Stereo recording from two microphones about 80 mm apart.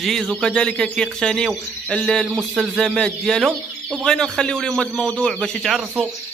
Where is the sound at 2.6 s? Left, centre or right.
Centre.